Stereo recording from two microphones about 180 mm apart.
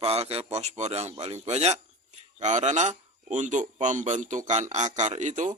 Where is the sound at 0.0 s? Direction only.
35° right (ahead or behind).